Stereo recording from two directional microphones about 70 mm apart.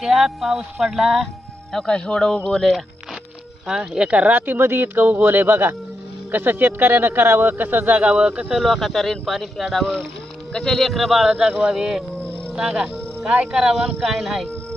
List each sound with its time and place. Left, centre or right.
0.0 s speech: centre
3.6 s speech: centre; by 8.0 s right
8.0 s speech: centre